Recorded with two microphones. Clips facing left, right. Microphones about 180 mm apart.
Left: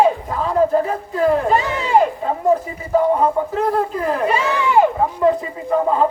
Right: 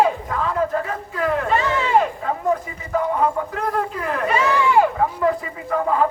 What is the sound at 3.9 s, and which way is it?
Speech, 35° left (ahead or behind).